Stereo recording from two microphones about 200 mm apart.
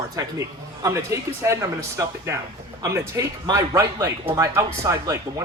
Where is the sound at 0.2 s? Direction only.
15° right (ahead or behind).